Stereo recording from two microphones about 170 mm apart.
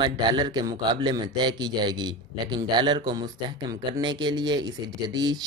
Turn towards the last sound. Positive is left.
turn(degrees=-25)  # may be behind; listen again after turning